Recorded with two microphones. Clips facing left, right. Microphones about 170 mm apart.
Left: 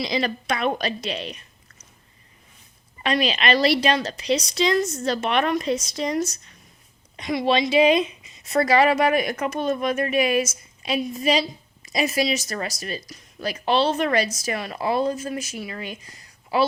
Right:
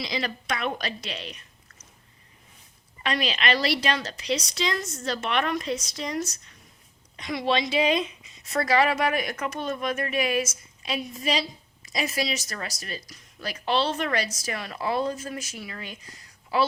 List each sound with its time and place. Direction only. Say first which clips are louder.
0.0 s a woman's voice: left 6 dB; 25° left (ahead or behind)
3.0 s a woman's voice: left 5 dB; 20° left (ahead or behind)
7.2 s speech: left 4 dB; 15° left (ahead or behind)